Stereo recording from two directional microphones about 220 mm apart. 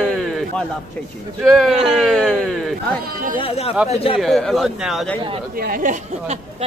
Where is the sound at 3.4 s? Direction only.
25° left (ahead or behind).